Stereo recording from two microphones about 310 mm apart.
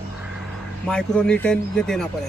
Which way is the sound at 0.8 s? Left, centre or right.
Centre.